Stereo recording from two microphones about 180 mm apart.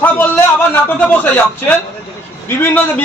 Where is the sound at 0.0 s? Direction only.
10° left (ahead or behind).